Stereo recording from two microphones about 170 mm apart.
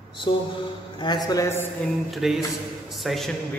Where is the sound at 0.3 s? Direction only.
30° left (ahead or behind).